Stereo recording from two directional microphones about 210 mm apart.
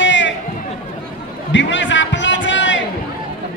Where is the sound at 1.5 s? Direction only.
60° left (ahead or behind).